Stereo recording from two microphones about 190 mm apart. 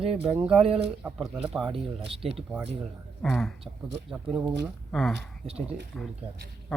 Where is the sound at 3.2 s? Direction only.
5° left (ahead or behind).